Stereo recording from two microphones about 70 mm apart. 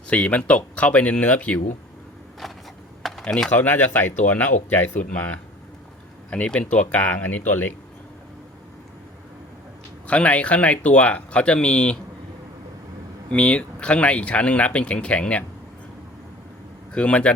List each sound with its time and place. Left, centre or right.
0.1 s speech: centre
3.0 s typing: centre
3.2 s speech: centre
3.6 s speech: left
6.3 s speech: centre
10.1 s speech: centre
13.3 s speech: centre
16.9 s speech: centre